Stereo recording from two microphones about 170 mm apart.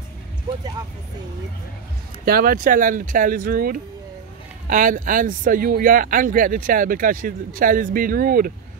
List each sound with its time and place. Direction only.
2.2 s speech: 60° right (ahead or behind)